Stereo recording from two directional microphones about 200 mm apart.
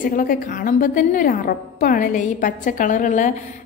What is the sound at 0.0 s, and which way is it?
A woman's voice, 45° left (ahead or behind).